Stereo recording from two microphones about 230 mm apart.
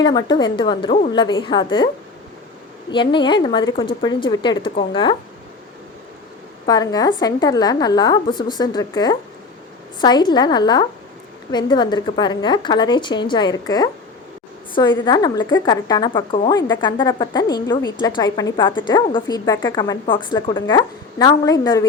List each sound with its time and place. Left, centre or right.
0.0 s a woman's voice: centre
2.9 s a woman's voice: left
6.7 s a woman's voice: centre